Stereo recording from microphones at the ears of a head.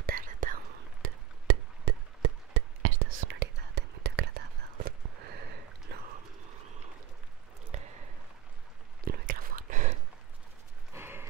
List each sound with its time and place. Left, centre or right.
0.0 s whispering: right
7.7 s squish: right
9.0 s whispering: right